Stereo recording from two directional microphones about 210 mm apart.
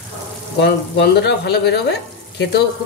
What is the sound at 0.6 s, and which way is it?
Speech, 55° left (ahead or behind).